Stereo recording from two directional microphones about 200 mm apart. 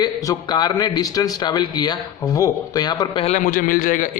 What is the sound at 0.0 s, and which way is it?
A man's voice, 20° left (ahead or behind).